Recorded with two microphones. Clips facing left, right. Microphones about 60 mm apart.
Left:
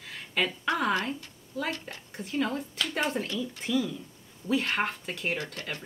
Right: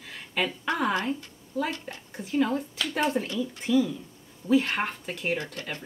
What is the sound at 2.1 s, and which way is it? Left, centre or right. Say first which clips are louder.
Speech: right 4 dB; centre.